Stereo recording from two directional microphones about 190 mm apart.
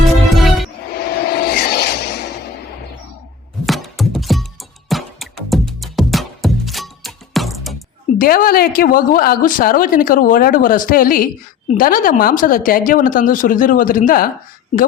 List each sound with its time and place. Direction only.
0.3 s music: centre (ahead or behind)
0.9 s a sound: 55° left (ahead or behind)
3.7 s music: centre (ahead or behind)
8.2 s a woman's voice: 50° left (ahead or behind)